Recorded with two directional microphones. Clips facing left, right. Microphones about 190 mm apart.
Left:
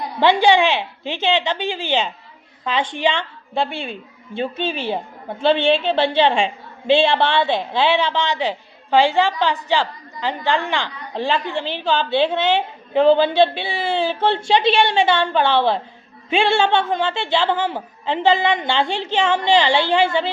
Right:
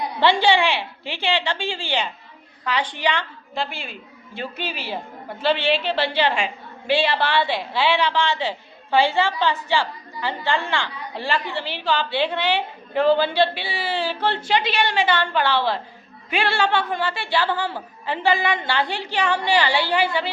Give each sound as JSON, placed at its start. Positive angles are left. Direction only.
{"t": 0.2, "sound": "a woman's voice", "side_deg": 15}
{"t": 4.4, "sound": "a woman's voice", "side_deg": 25}
{"t": 5.5, "sound": "a woman's voice", "side_deg": 50}
{"t": 5.9, "sound": "a woman's voice", "side_deg": 25}